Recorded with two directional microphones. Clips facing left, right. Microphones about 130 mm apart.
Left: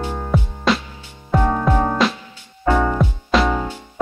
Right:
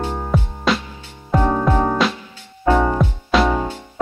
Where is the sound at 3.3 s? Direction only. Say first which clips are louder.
Right 1 dB; centre (ahead or behind).